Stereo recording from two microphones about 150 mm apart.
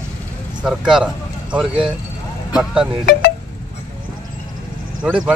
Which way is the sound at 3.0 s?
90° left.